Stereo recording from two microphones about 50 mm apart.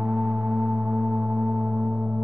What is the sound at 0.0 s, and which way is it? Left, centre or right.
Singing bowl, centre.